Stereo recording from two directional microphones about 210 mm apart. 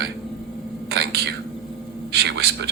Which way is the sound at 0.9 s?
50° right (ahead or behind).